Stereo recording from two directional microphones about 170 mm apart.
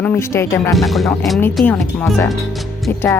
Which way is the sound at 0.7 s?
Centre (ahead or behind).